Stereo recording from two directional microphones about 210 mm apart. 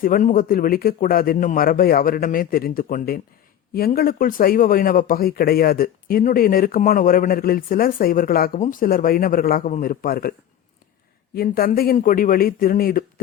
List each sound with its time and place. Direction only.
0.0 s speech: 40° left (ahead or behind)
11.3 s speech: 45° left (ahead or behind)